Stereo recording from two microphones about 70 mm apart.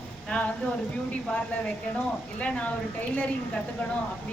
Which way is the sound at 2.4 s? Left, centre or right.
Centre.